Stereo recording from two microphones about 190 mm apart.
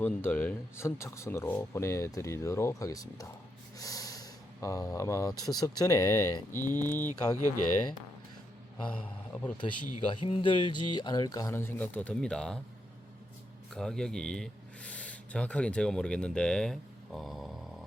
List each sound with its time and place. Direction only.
0.0 s speech: 10° left (ahead or behind)
3.8 s a sound: 20° left (ahead or behind)
5.5 s speech: 20° left (ahead or behind)
6.6 s speech: 40° left (ahead or behind)
6.8 s speech: 10° left (ahead or behind)
9.3 s speech: 5° left (ahead or behind)
9.6 s speech: 25° left (ahead or behind); by 12.5 s 5° left (ahead or behind)
13.7 s speech: 5° left (ahead or behind)